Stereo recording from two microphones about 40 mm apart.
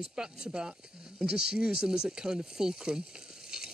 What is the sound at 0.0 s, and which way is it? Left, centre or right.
Speech, centre.